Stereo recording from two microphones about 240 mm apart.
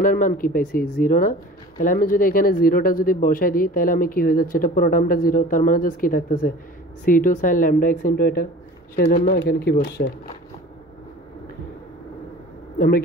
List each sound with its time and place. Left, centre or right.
0.0 s speech: left
12.7 s speech: left